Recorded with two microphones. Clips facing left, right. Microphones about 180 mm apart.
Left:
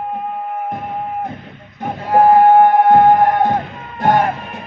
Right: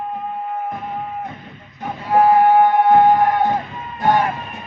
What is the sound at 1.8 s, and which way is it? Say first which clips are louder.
Music: left 3 dB; 45° left (ahead or behind).